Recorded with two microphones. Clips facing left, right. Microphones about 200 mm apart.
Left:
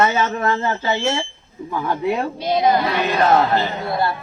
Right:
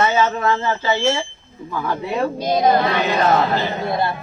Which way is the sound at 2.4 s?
40° right (ahead or behind).